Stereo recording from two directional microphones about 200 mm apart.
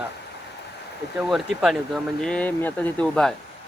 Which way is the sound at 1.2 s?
Centre (ahead or behind).